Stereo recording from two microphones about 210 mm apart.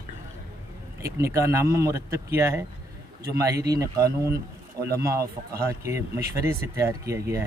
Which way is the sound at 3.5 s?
50° right (ahead or behind).